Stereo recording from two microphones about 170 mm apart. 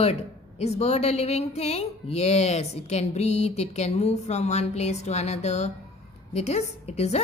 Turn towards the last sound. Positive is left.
turn(degrees=40)  # may be behind; listen again after turning